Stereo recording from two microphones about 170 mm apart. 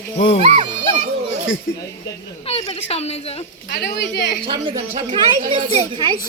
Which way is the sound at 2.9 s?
35° left (ahead or behind).